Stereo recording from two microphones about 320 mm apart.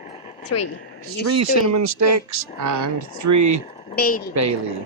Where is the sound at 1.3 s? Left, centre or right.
Right.